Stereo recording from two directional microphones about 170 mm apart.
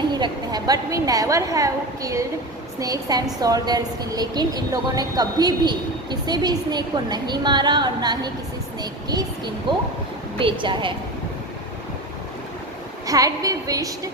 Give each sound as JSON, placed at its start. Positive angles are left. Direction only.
{"t": 0.1, "sound": "a woman's voice", "side_deg": -25}
{"t": 13.1, "sound": "a woman's voice", "side_deg": -20}